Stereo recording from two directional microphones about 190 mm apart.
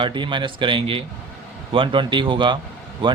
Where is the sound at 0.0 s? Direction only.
25° right (ahead or behind).